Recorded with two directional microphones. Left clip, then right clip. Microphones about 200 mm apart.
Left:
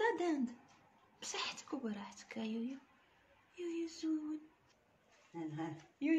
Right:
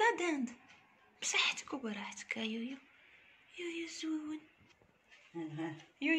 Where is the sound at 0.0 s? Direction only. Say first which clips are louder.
Right 3 dB; 10° right (ahead or behind).